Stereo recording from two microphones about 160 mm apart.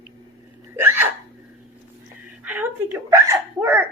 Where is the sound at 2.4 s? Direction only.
10° right (ahead or behind).